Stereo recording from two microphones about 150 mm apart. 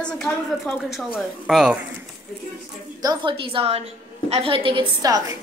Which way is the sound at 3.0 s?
30° right (ahead or behind).